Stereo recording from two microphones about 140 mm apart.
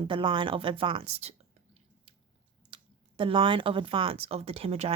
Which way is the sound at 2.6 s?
40° right (ahead or behind).